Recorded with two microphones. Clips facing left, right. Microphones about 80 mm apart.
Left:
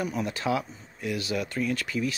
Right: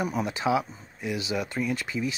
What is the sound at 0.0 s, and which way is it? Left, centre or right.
Speech, centre.